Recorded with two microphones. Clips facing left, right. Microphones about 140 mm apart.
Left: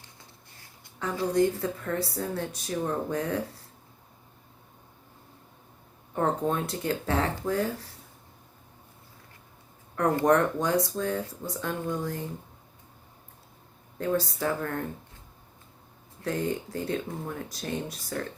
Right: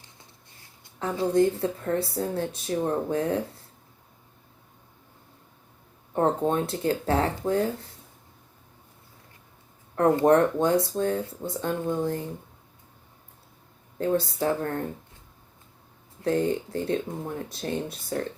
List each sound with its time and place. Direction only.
0.6 s speech: 25° right (ahead or behind)
6.1 s speech: 30° right (ahead or behind)
9.9 s speech: 30° right (ahead or behind)
14.0 s speech: 35° right (ahead or behind)
16.2 s speech: 30° right (ahead or behind)